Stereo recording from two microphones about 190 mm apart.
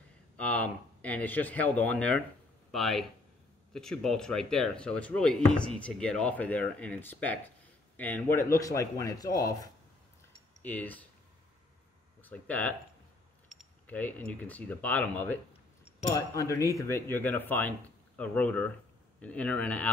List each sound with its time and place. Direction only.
0.4 s speech: 5° left (ahead or behind)
10.6 s speech: 10° left (ahead or behind)
12.2 s speech: 10° left (ahead or behind)
15.8 s cutlery: 35° left (ahead or behind)
16.2 s speech: 15° left (ahead or behind)